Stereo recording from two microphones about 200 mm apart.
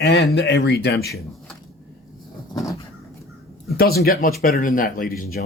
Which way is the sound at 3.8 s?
50° left (ahead or behind).